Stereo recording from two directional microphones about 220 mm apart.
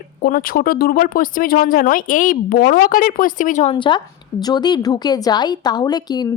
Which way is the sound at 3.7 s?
20° left (ahead or behind).